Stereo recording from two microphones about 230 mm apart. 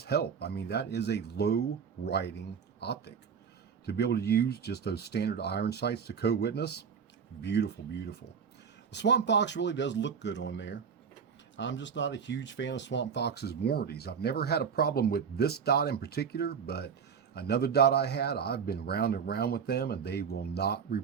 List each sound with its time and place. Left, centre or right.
0.0 s speech: left